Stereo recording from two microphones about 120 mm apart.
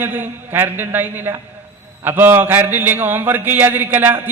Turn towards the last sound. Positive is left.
turn(degrees=-15)  # may be behind; listen again after turning